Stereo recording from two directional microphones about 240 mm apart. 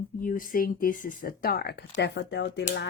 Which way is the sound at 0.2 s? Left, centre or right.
Left.